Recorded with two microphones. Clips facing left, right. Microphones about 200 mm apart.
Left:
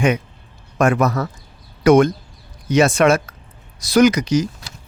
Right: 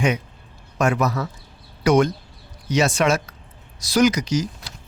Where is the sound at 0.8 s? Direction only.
50° left (ahead or behind).